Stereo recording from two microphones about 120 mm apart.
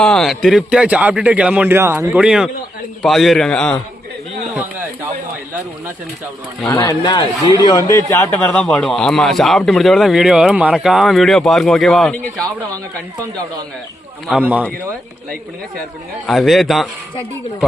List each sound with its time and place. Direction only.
0.0 s a man's voice: centre (ahead or behind); by 2.1 s 20° right (ahead or behind)
2.1 s a man's voice: 5° right (ahead or behind)
7.0 s a man's voice: 40° left (ahead or behind)
7.7 s speech: 30° left (ahead or behind)
8.5 s speech: 5° left (ahead or behind)
14.3 s a man's voice: 10° right (ahead or behind)
16.2 s speech: centre (ahead or behind)